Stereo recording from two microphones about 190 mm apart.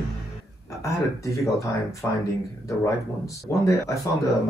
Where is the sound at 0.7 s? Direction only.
15° left (ahead or behind).